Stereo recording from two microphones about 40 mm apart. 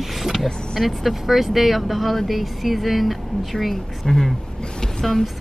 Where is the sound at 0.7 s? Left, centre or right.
Centre.